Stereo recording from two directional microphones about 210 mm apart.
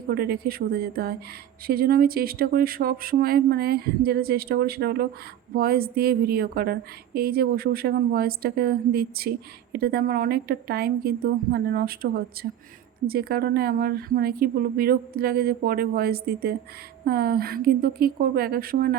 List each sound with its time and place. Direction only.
0.1 s speech: 45° right (ahead or behind)